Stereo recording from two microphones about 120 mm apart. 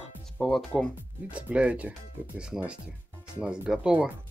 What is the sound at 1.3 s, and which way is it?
Speech, 10° right (ahead or behind).